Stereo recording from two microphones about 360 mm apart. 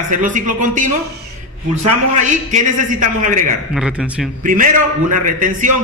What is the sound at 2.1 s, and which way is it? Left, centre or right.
Speech, centre.